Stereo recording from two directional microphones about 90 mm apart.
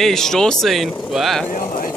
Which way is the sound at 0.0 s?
5° left (ahead or behind).